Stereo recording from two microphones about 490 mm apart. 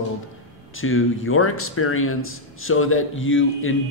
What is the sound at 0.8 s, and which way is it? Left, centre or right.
Speech, left.